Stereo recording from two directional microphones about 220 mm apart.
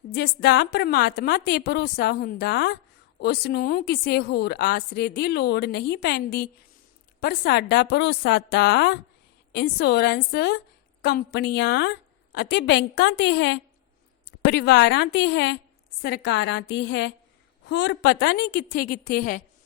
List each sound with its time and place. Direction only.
0.1 s a woman's voice: 50° left (ahead or behind)